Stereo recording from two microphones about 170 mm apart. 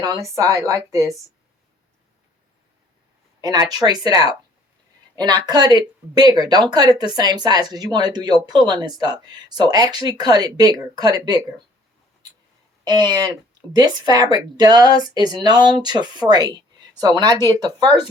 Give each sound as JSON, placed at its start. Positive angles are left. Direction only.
{"t": 0.0, "sound": "speech", "side_deg": -20}
{"t": 3.4, "sound": "speech", "side_deg": -20}
{"t": 12.8, "sound": "speech", "side_deg": -25}